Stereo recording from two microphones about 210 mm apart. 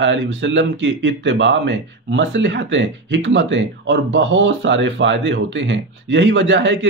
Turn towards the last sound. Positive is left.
turn(degrees=-60)  # may be behind; listen again after turning